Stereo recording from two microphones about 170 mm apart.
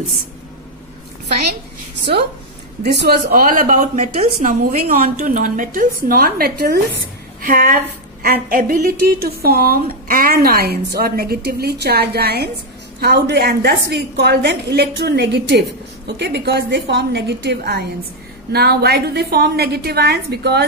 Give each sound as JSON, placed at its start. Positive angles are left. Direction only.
{"t": 2.8, "sound": "a woman's voice", "side_deg": -75}
{"t": 5.1, "sound": "a woman's voice", "side_deg": -50}
{"t": 18.5, "sound": "a woman's voice", "side_deg": -70}